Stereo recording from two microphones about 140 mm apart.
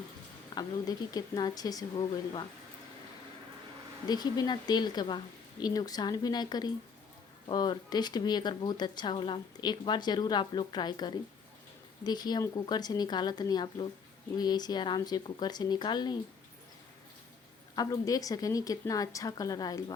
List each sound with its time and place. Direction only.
0.5 s speech: 30° left (ahead or behind)
4.1 s speech: 30° left (ahead or behind)
17.7 s speech: 25° left (ahead or behind)